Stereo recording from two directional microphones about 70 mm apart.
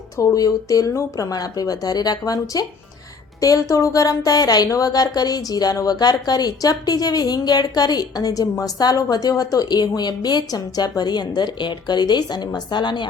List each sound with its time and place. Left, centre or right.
0.2 s a woman's voice: left